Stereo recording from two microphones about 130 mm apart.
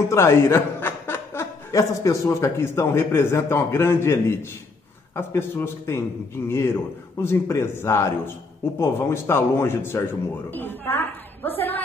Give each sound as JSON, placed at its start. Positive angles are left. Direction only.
{"t": 0.1, "sound": "a man's voice", "side_deg": 20}